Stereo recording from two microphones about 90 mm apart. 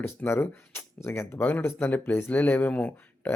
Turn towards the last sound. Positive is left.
turn(degrees=15)  # may be behind; listen again after turning